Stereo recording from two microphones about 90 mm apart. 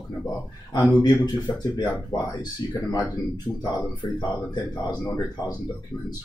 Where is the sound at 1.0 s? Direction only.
45° left (ahead or behind).